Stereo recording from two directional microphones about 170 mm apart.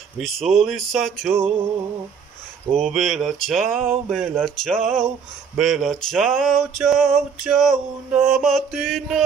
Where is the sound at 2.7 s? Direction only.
45° right (ahead or behind).